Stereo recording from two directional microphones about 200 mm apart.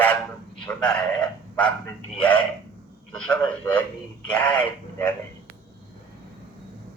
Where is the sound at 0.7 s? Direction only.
5° left (ahead or behind).